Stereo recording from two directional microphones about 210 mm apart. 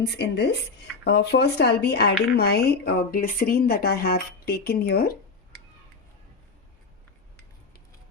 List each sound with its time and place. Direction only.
0.0 s speech: 55° left (ahead or behind)